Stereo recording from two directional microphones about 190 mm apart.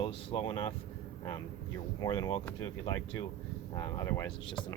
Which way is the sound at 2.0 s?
20° left (ahead or behind).